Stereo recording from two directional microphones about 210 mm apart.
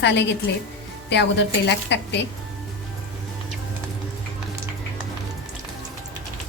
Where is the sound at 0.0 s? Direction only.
55° left (ahead or behind).